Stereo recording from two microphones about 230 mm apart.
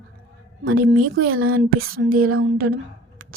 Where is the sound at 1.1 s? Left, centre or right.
Right.